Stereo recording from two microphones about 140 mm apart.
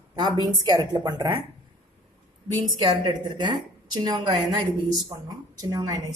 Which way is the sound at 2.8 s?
35° right (ahead or behind).